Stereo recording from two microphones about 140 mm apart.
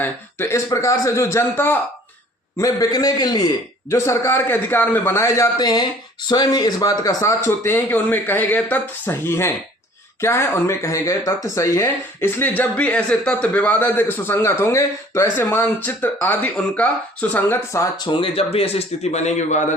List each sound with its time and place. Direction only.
0.0 s a man's voice: 15° left (ahead or behind)
3.8 s a man's voice: 20° left (ahead or behind)
18.0 s speech: 35° left (ahead or behind); by 19.7 s 55° left (ahead or behind)